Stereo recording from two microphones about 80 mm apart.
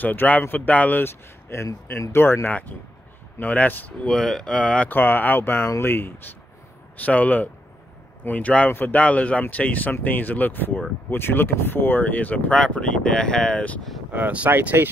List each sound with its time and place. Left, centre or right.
0.0 s speech: left
4.1 s speech: centre
4.9 s speech: left; by 13.7 s centre
14.1 s speech: centre